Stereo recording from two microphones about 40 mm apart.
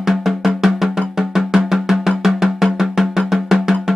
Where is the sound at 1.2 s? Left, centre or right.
Centre.